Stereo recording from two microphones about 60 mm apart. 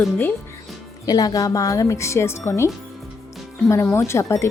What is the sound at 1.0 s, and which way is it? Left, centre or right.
Speech, left.